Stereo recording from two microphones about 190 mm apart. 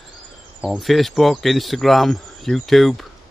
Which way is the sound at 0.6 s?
Centre (ahead or behind).